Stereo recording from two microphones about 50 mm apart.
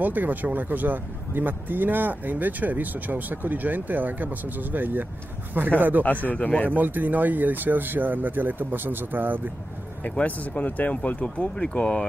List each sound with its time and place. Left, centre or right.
0.0 s speech: right
6.2 s a man's voice: left
6.7 s speech: right
10.1 s speech: left